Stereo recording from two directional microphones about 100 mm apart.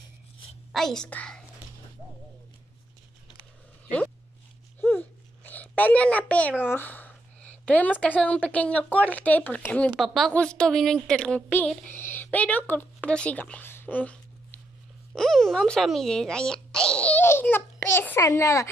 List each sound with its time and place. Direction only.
0.7 s a woman's voice: 5° left (ahead or behind)
4.7 s a sound: 20° left (ahead or behind)
6.6 s a woman's voice: 20° left (ahead or behind)
9.9 s speech: centre (ahead or behind)
10.3 s speech: 10° left (ahead or behind)
11.9 s a sound: 20° left (ahead or behind)
15.1 s a child's voice: 5° left (ahead or behind); by 18.7 s 30° left (ahead or behind)